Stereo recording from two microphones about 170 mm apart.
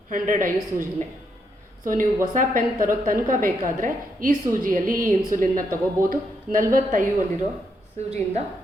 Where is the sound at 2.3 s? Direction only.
50° right (ahead or behind).